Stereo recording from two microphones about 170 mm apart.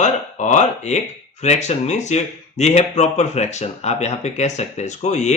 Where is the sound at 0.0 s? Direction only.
45° left (ahead or behind).